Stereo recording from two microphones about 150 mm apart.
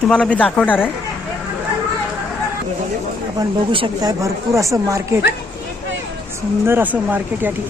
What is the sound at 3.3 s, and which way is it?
Speech, 30° right (ahead or behind).